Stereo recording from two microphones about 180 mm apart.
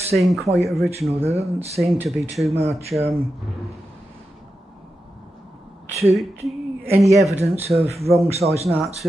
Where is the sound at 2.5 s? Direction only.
35° right (ahead or behind).